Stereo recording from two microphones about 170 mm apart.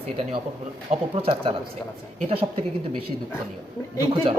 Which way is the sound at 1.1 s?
35° right (ahead or behind).